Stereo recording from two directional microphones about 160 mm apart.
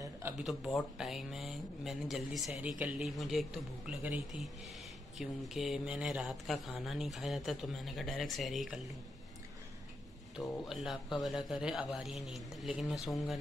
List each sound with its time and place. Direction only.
0.4 s speech: centre (ahead or behind)
10.4 s speech: 20° left (ahead or behind)
10.7 s speech: centre (ahead or behind)